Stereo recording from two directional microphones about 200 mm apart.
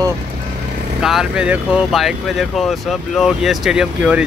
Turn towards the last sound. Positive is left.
turn(degrees=-5)  # may be behind; listen again after turning